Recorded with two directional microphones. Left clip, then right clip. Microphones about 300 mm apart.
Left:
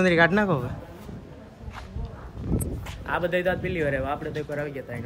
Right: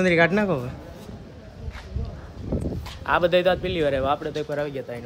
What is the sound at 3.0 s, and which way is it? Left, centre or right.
Speech, centre.